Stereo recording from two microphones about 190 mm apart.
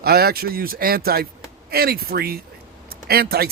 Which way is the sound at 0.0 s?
55° right (ahead or behind).